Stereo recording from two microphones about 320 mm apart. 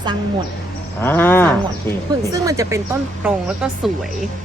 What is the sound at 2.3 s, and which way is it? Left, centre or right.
Speech, centre.